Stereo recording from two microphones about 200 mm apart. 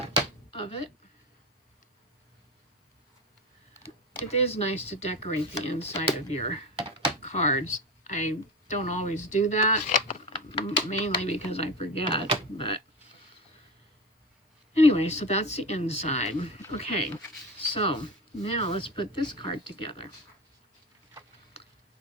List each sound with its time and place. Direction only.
0.5 s a sound: 25° left (ahead or behind)
4.3 s speech: 30° left (ahead or behind)
14.7 s speech: 30° left (ahead or behind)